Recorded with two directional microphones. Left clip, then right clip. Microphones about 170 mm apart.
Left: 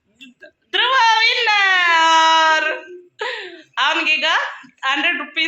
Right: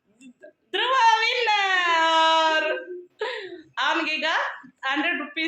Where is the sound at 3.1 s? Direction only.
15° left (ahead or behind).